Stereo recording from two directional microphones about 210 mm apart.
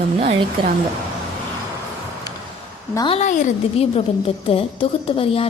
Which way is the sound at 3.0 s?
30° left (ahead or behind).